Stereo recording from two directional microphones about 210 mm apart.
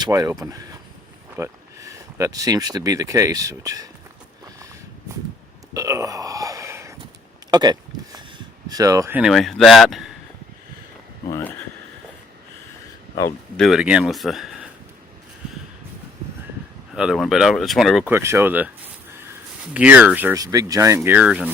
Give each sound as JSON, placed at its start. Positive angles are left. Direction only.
{"t": 0.0, "sound": "speech", "side_deg": -15}
{"t": 5.7, "sound": "burping", "side_deg": -15}
{"t": 7.5, "sound": "a sound", "side_deg": -20}
{"t": 8.7, "sound": "speech", "side_deg": -15}
{"t": 11.3, "sound": "speech", "side_deg": 15}
{"t": 13.6, "sound": "speech", "side_deg": 0}
{"t": 16.9, "sound": "speech", "side_deg": -5}
{"t": 18.1, "sound": "speech", "side_deg": -10}